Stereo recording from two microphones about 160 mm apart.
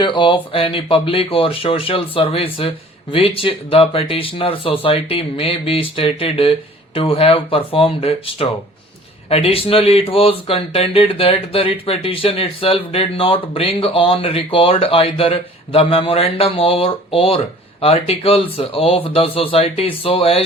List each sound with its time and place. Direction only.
0.0 s speech: 30° left (ahead or behind)